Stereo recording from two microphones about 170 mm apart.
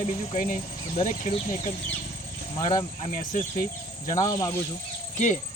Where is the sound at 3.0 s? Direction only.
50° left (ahead or behind).